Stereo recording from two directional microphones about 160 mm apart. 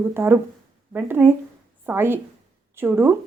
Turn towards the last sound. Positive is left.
turn(degrees=-15)  # may be behind; listen again after turning